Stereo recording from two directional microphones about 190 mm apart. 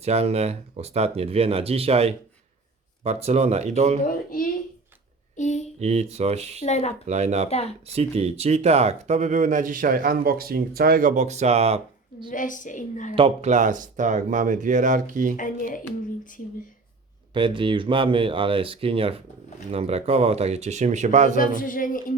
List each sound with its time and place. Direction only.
0.0 s speech: 35° right (ahead or behind)
4.0 s a woman's voice: 45° left (ahead or behind)
5.4 s a sound: 40° left (ahead or behind)
5.8 s speech: 35° right (ahead or behind)
6.7 s speech: 35° left (ahead or behind)
7.1 s speech: 35° right (ahead or behind)
12.3 s a woman's voice: 45° left (ahead or behind)
13.1 s speech: 30° right (ahead or behind)
15.4 s a woman's voice: 45° left (ahead or behind)
17.3 s speech: 25° right (ahead or behind)
21.3 s a woman's voice: 45° left (ahead or behind)